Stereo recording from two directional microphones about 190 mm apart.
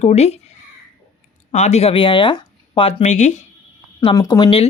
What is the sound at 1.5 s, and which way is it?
Speech, 35° left (ahead or behind).